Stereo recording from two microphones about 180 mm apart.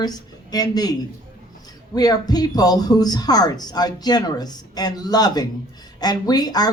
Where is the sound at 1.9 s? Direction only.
20° left (ahead or behind).